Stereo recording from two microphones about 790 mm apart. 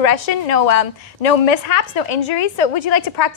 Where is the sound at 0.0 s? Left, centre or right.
Left.